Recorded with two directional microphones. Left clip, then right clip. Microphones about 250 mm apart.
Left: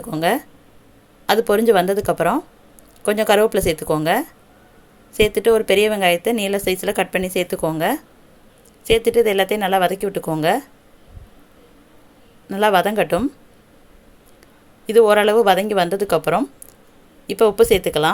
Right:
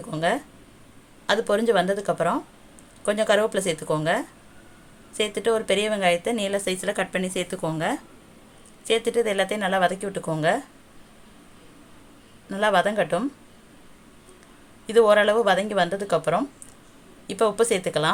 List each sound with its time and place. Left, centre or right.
0.0 s a woman's voice: left
12.5 s a woman's voice: left
14.8 s a woman's voice: left